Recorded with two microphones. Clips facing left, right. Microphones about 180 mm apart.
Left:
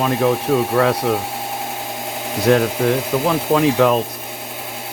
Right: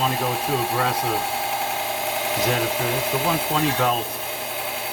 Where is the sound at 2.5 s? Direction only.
60° left (ahead or behind).